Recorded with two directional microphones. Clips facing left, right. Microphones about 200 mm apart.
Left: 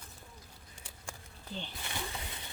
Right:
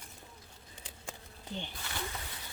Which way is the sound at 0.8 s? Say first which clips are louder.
Right 2 dB; 20° right (ahead or behind).